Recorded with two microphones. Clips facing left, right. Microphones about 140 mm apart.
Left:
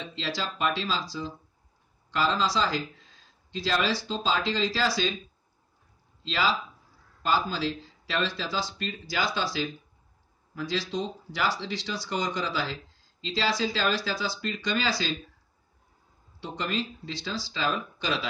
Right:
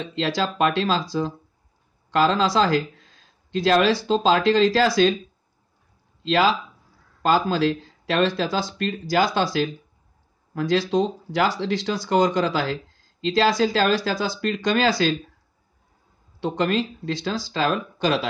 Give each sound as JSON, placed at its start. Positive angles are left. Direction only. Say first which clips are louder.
{"t": 0.0, "sound": "speech", "louder": "right 9 dB", "side_deg": -55}
{"t": 6.2, "sound": "speech", "louder": "right 8 dB", "side_deg": -55}
{"t": 16.3, "sound": "speech", "louder": "right 9 dB", "side_deg": -60}